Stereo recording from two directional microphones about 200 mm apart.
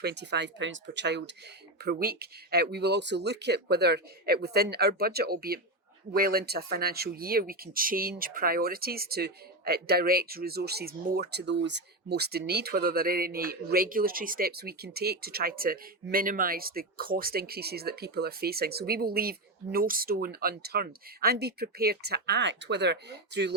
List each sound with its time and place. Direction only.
0.0 s speech: 55° right (ahead or behind)